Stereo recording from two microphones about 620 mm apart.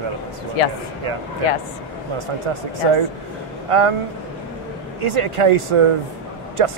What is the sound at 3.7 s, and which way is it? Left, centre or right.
Speech, right.